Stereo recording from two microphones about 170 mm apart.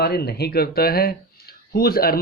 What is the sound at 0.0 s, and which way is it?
Speech, 70° left (ahead or behind).